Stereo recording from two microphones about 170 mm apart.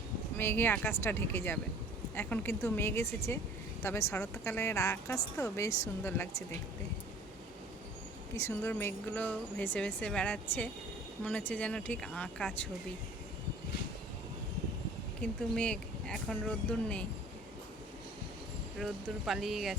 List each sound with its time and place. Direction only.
0.3 s speech: 15° left (ahead or behind)
8.4 s speech: 15° left (ahead or behind)
15.2 s speech: 5° left (ahead or behind)
18.8 s speech: centre (ahead or behind)